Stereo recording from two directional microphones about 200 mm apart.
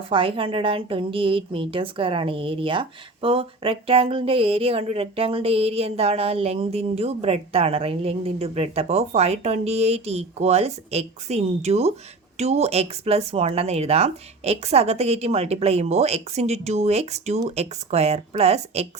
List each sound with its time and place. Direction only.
0.1 s a woman's voice: 25° right (ahead or behind)